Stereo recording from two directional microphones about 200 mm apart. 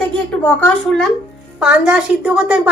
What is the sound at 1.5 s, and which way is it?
A woman's voice, 5° right (ahead or behind).